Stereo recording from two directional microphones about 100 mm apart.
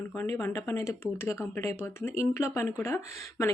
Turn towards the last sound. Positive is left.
turn(degrees=25)  # may be behind; listen again after turning